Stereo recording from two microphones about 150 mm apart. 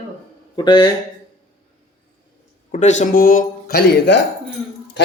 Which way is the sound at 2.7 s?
50° left (ahead or behind).